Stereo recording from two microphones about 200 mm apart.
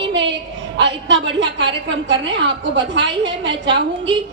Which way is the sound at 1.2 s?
65° right (ahead or behind).